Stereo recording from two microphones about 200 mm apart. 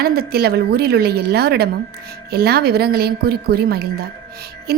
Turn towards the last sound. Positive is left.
turn(degrees=-50)  # may be behind; listen again after turning